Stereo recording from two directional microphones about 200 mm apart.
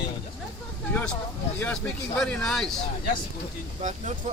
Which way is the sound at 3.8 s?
35° right (ahead or behind).